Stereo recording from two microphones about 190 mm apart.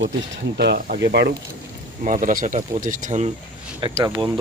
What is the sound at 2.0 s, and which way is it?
Speech, 45° right (ahead or behind).